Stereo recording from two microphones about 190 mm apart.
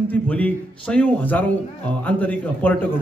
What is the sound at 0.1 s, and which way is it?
A man's voice, 10° left (ahead or behind).